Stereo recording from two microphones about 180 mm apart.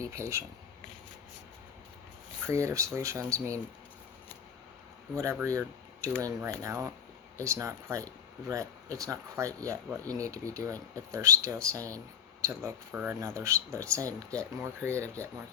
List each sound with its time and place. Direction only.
0.0 s speech: 15° right (ahead or behind)
2.5 s speech: 15° right (ahead or behind)
5.1 s speech: 15° right (ahead or behind)